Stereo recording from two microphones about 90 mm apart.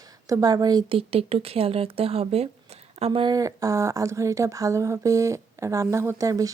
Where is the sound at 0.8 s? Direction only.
90° right.